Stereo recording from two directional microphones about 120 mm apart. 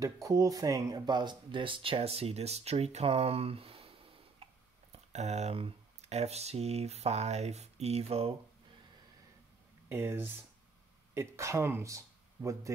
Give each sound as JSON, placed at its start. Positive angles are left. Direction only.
{"t": 0.0, "sound": "speech", "side_deg": -30}
{"t": 4.9, "sound": "speech", "side_deg": -65}
{"t": 9.8, "sound": "speech", "side_deg": -20}